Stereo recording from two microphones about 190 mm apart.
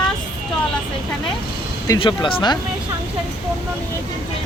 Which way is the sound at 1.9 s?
25° left (ahead or behind).